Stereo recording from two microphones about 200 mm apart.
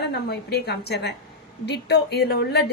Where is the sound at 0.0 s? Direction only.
55° left (ahead or behind).